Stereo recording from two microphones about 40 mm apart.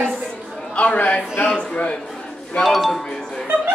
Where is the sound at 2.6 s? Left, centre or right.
Centre.